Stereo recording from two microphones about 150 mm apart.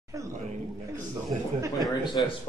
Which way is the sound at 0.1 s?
20° right (ahead or behind).